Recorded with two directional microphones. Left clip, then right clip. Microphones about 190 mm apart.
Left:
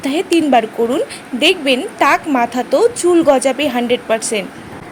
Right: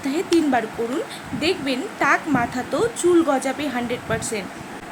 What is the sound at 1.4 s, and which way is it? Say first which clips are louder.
A woman's voice: left 10 dB; 40° left (ahead or behind).